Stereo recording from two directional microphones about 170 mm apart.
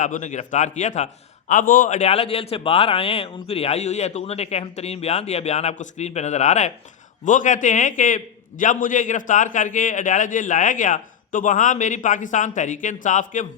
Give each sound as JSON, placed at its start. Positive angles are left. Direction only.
{"t": 0.0, "sound": "a man's voice", "side_deg": 45}
{"t": 2.0, "sound": "a man's voice", "side_deg": 40}